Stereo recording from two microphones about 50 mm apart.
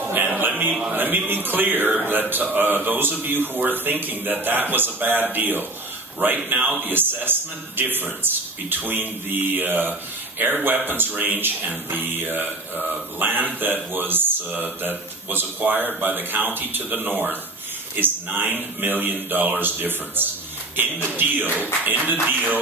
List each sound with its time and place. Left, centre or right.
0.1 s a sound: right
0.9 s speech: right
6.9 s a man's voice: right